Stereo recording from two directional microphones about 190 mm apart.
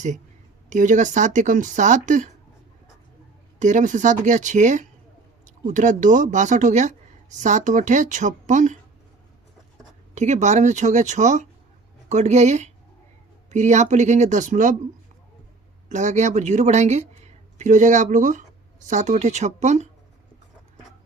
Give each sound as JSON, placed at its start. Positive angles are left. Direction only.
{"t": 0.7, "sound": "a woman's voice", "side_deg": -40}
{"t": 3.6, "sound": "a woman's voice", "side_deg": -40}
{"t": 10.2, "sound": "a woman's voice", "side_deg": -40}
{"t": 15.9, "sound": "speech", "side_deg": -40}